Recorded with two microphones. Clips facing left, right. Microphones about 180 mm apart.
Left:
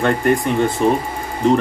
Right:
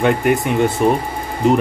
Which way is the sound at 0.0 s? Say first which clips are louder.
Right 1 dB; 15° right (ahead or behind).